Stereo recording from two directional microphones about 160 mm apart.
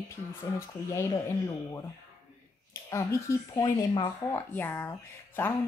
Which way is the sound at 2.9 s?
20° left (ahead or behind).